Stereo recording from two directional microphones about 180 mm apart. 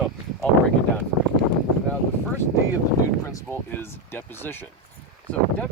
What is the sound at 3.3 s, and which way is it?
Speech, 15° left (ahead or behind).